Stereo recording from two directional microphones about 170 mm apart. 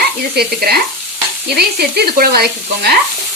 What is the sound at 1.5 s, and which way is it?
Frying, 70° right (ahead or behind).